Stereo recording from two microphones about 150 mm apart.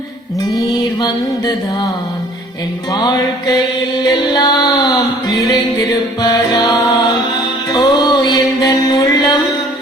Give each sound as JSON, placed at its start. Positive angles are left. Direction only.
{"t": 0.5, "sound": "music", "side_deg": 25}
{"t": 2.9, "sound": "music", "side_deg": 30}